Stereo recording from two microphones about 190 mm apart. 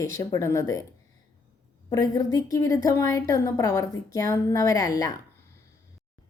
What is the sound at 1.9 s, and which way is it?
A woman's voice, 20° left (ahead or behind).